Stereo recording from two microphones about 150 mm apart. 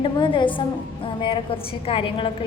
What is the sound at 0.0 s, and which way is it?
A woman's voice, 35° left (ahead or behind).